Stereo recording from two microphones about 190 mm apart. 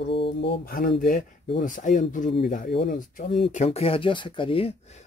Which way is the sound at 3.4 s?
35° left (ahead or behind).